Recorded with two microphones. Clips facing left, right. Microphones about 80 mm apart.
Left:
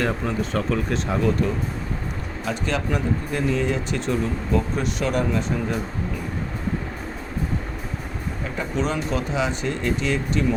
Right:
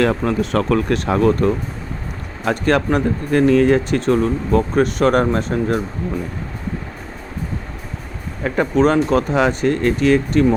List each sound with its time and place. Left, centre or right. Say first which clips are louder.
0.0 s speech: right 7 dB; right
8.7 s speech: right 10 dB; right